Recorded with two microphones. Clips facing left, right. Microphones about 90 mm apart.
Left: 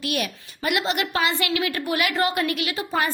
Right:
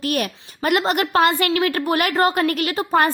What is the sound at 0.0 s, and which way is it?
A woman's voice, 45° right (ahead or behind).